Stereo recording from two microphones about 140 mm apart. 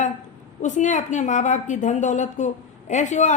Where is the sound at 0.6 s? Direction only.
60° left (ahead or behind).